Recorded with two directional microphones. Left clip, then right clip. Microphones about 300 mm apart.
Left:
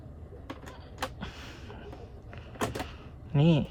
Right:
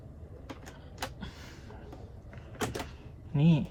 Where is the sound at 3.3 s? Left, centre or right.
Centre.